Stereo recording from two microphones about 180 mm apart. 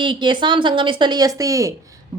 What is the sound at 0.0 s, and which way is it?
A woman's voice, 25° right (ahead or behind).